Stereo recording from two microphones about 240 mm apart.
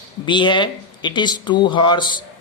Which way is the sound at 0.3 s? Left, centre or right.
Centre.